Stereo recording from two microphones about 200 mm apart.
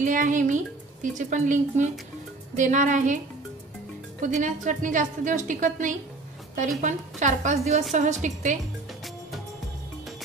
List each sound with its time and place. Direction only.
0.0 s a woman's voice: 40° right (ahead or behind)
4.2 s a woman's voice: 40° right (ahead or behind)